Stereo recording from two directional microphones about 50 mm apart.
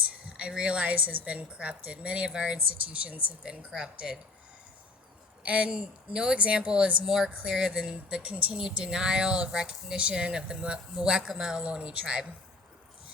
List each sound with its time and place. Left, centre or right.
0.3 s a woman's voice: right
5.4 s a woman's voice: right
7.0 s a woman's voice: centre